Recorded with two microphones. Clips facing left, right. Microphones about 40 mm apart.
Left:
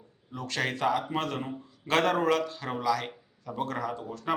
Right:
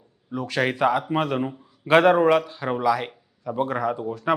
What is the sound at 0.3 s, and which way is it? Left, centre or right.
A man's voice, centre.